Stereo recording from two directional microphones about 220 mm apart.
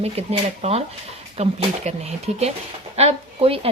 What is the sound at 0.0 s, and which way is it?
A woman's voice, 30° right (ahead or behind).